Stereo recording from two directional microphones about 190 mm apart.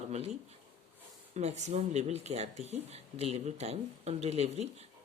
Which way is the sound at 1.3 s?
35° right (ahead or behind).